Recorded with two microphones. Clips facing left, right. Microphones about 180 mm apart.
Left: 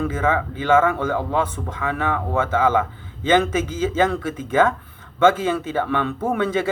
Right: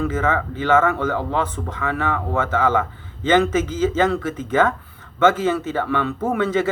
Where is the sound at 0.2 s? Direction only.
15° left (ahead or behind).